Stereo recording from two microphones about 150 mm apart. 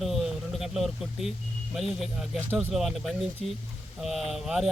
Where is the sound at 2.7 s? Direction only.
Centre (ahead or behind).